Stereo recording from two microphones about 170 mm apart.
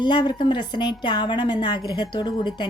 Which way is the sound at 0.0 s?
25° left (ahead or behind).